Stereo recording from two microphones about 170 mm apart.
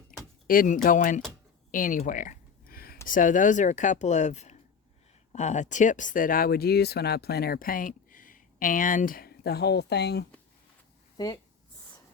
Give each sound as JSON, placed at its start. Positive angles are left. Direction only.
{"t": 0.4, "sound": "speech", "side_deg": 55}
{"t": 1.7, "sound": "a sound", "side_deg": 50}
{"t": 3.1, "sound": "speech", "side_deg": 50}